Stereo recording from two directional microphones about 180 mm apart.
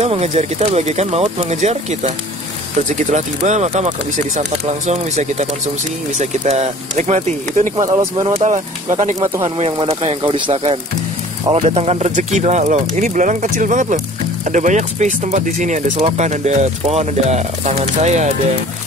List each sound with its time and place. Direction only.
0.0 s speech: 35° right (ahead or behind)
7.8 s speech: 20° right (ahead or behind)
8.4 s speech: 35° right (ahead or behind)